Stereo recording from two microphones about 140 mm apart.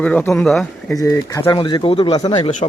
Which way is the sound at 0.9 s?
25° left (ahead or behind).